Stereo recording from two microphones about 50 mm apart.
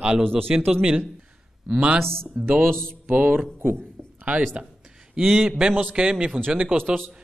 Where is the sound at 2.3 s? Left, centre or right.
Right.